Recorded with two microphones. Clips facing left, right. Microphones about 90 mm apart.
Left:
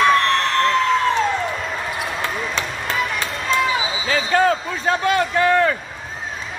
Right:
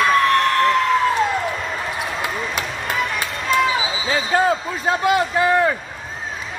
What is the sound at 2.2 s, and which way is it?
Basketball bounce, 10° right (ahead or behind).